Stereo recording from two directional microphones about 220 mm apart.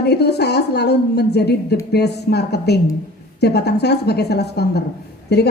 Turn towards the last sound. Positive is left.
turn(degrees=50)  # may be behind; listen again after turning